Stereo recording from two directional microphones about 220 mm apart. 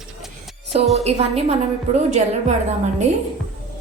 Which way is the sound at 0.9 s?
30° right (ahead or behind).